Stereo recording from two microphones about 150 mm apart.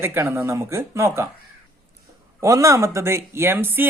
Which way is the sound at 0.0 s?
15° right (ahead or behind).